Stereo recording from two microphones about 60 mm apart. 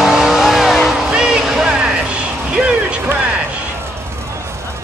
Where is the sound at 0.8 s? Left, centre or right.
Centre.